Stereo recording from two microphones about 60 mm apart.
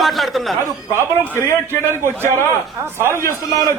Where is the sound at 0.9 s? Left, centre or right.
Right.